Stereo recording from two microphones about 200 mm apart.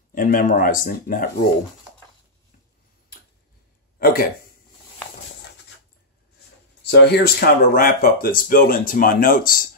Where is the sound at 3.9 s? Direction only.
45° left (ahead or behind).